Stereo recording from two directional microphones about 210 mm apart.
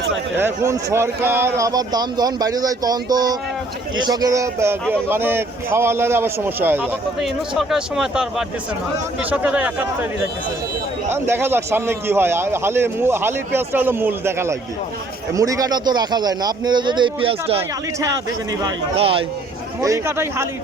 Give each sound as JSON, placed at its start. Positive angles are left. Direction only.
{"t": 0.3, "sound": "a man's voice", "side_deg": -10}
{"t": 11.1, "sound": "a man's voice", "side_deg": -10}
{"t": 18.9, "sound": "speech", "side_deg": -25}
{"t": 19.8, "sound": "a man's voice", "side_deg": -15}